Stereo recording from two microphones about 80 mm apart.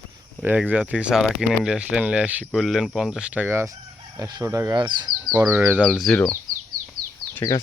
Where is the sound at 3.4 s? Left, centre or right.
Right.